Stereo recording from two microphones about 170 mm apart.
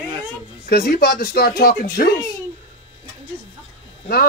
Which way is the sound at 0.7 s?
65° left (ahead or behind).